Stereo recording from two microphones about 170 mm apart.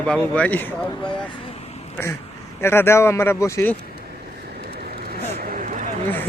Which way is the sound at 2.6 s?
15° left (ahead or behind).